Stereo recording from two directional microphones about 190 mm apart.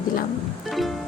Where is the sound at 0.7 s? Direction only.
Centre (ahead or behind).